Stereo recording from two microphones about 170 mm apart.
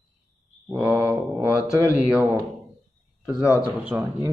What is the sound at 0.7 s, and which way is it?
Speech, 5° right (ahead or behind).